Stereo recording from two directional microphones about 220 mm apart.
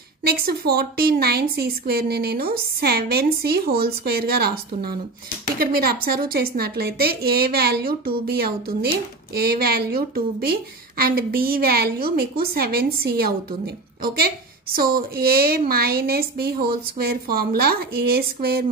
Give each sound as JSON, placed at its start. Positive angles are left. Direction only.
{"t": 0.2, "sound": "a woman's voice", "side_deg": -45}